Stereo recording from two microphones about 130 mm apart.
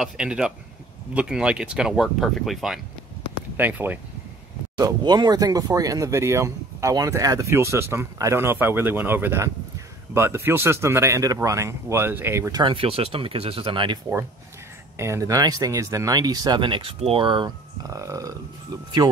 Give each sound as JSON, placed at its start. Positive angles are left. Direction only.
{"t": 0.0, "sound": "speech", "side_deg": -5}
{"t": 3.5, "sound": "speech", "side_deg": -15}
{"t": 4.7, "sound": "speech", "side_deg": -30}
{"t": 12.6, "sound": "speech", "side_deg": -45}
{"t": 15.0, "sound": "speech", "side_deg": -20}
{"t": 17.8, "sound": "burping", "side_deg": -25}